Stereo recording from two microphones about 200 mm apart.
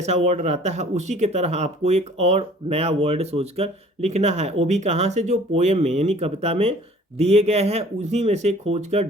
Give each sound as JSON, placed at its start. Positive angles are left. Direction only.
{"t": 0.0, "sound": "speech", "side_deg": -35}